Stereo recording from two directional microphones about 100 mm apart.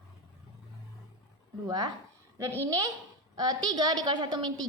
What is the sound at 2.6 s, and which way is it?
A woman's voice, 35° right (ahead or behind).